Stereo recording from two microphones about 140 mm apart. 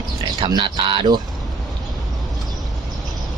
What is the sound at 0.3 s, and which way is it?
Speech, 35° right (ahead or behind).